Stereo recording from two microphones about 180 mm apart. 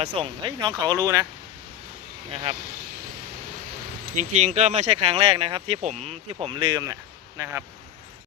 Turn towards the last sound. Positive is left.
turn(degrees=-15)  # may be behind; listen again after turning